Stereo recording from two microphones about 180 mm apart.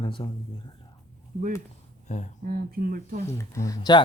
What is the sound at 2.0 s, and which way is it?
Speech, 40° left (ahead or behind).